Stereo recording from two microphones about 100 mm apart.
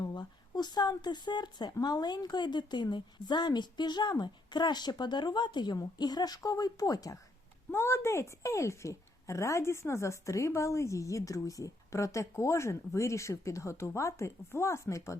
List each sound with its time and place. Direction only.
0.0 s a woman's voice: 45° left (ahead or behind)
7.7 s a woman's voice: 25° left (ahead or behind)